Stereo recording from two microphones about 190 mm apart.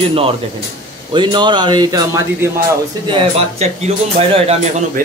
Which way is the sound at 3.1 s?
30° right (ahead or behind).